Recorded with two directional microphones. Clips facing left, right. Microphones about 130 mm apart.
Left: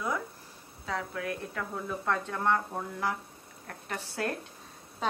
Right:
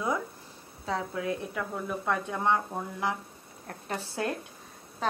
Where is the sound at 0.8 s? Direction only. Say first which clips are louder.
Right 3 dB; 25° right (ahead or behind).